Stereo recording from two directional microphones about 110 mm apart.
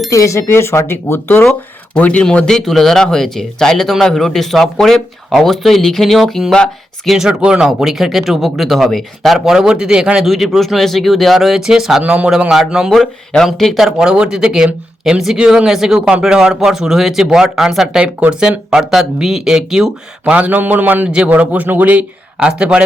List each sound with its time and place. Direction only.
0.1 s speech: 30° left (ahead or behind)
1.5 s speech: 10° left (ahead or behind); by 22.8 s 10° right (ahead or behind)